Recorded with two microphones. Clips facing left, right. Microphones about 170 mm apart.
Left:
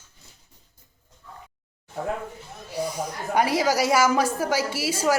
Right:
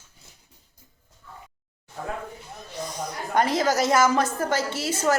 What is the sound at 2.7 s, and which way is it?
A woman's voice, 10° left (ahead or behind).